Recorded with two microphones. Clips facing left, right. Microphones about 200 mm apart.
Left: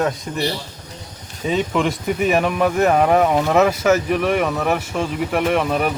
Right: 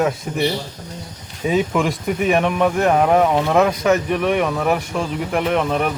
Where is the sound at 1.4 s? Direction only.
5° right (ahead or behind).